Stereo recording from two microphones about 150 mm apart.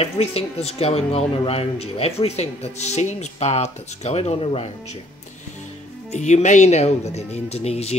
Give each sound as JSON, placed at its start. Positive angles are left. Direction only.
{"t": 0.0, "sound": "speech", "side_deg": 40}
{"t": 6.1, "sound": "speech", "side_deg": 50}